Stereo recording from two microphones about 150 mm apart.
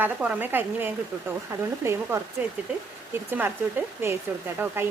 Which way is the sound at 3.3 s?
10° right (ahead or behind).